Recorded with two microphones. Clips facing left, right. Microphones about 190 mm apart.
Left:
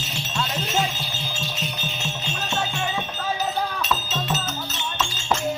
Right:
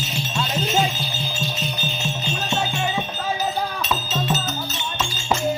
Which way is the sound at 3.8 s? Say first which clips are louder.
Right 2 dB; centre (ahead or behind).